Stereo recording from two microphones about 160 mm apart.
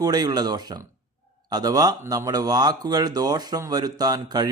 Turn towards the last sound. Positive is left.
turn(degrees=-25)  # may be behind; listen again after turning